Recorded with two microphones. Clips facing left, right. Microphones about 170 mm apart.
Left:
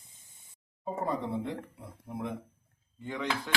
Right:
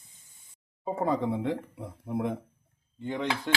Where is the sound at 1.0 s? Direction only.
90° right.